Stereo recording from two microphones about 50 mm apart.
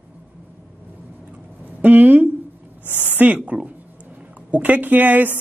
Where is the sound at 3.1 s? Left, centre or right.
Right.